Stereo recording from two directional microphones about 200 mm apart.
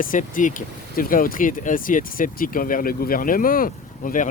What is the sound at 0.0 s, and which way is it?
Speech, 40° left (ahead or behind).